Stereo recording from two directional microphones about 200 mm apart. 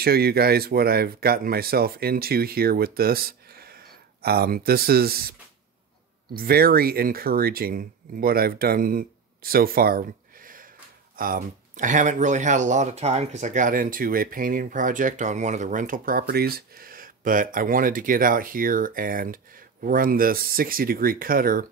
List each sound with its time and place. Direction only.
0.0 s speech: 50° right (ahead or behind)